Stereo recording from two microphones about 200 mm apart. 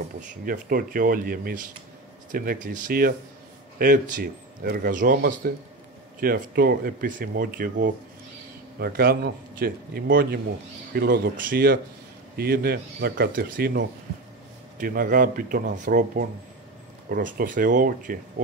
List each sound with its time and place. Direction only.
0.5 s speech: 45° right (ahead or behind)